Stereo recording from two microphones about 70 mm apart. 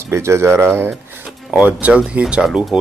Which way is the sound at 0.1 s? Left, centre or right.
Right.